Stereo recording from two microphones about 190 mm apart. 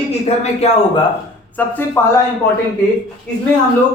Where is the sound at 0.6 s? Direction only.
35° left (ahead or behind).